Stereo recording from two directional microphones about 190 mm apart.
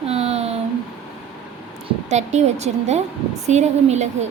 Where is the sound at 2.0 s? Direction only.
35° right (ahead or behind).